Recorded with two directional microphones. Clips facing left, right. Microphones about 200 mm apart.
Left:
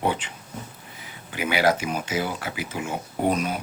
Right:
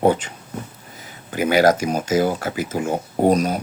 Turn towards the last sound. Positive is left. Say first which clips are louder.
# right 7 dB
turn(degrees=-40)  # may be behind; listen again after turning